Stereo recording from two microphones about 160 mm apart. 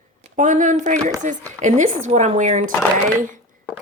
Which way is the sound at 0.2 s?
50° right (ahead or behind).